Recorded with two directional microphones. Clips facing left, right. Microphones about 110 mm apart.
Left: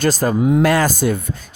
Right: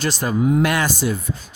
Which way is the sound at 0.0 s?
40° left (ahead or behind).